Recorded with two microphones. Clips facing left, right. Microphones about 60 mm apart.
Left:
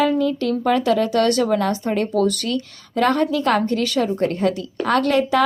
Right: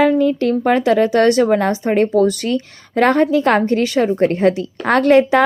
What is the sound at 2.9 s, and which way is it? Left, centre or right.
A woman's voice, right.